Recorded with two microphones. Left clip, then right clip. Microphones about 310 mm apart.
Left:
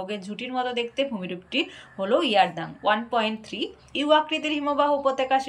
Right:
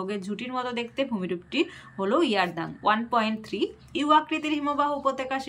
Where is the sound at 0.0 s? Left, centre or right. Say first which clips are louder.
Even; centre.